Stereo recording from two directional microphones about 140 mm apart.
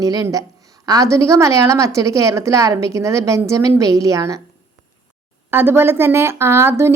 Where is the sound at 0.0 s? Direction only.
25° right (ahead or behind).